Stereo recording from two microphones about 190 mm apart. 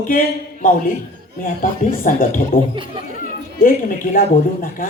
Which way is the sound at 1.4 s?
45° left (ahead or behind).